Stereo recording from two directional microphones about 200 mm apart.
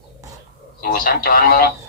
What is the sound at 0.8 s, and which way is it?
Speech, 50° left (ahead or behind).